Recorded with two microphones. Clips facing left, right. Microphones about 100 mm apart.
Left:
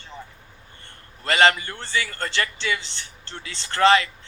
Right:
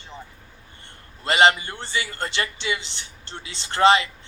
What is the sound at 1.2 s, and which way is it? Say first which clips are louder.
A man's voice: right 1 dB; 20° right (ahead or behind).